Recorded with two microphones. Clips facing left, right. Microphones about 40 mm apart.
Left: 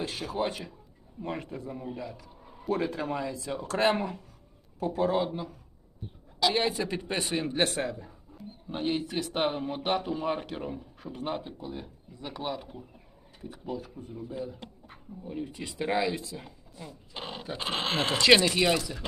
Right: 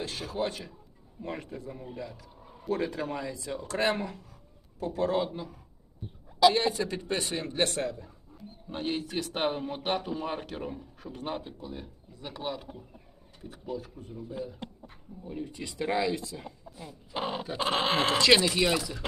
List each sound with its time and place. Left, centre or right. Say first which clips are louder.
0.0 s speech: left 1 dB; centre
3.9 s speech: left 3 dB; centre
4.8 s speech: left 1 dB; centre